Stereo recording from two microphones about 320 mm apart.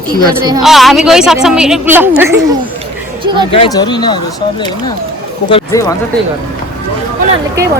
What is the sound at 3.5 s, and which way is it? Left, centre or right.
Speech, centre.